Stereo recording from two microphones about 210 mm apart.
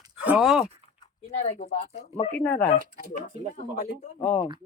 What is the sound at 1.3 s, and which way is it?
Speech, 30° left (ahead or behind).